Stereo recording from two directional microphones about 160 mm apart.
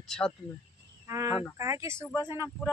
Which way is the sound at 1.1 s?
20° right (ahead or behind).